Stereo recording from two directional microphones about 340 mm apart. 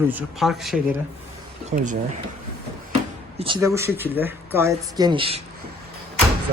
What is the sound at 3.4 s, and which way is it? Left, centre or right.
Speech, centre.